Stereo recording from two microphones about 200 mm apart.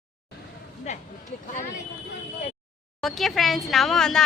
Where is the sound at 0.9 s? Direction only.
35° left (ahead or behind).